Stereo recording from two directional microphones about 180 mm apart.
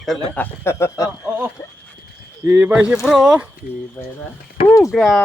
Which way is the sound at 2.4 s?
10° right (ahead or behind).